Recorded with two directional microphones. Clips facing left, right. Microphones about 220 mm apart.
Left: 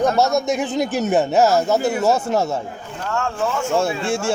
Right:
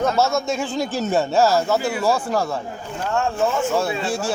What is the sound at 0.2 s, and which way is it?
Speech, 20° left (ahead or behind).